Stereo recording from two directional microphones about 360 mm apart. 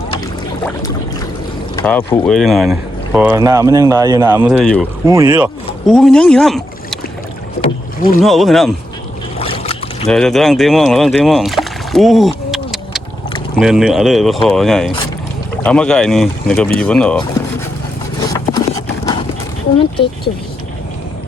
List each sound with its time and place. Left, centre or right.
1.7 s speech: centre
5.0 s speech: centre
8.2 s speech: centre
9.4 s boat: centre
10.1 s speech: centre
12.5 s a sound: centre
13.6 s speech: centre
18.3 s a sound: centre
19.8 s speech: centre